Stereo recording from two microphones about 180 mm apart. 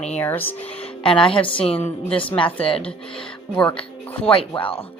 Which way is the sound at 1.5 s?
30° left (ahead or behind).